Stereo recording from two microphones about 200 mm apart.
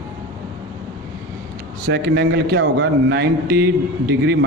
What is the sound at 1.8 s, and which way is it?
A man's voice, 55° right (ahead or behind).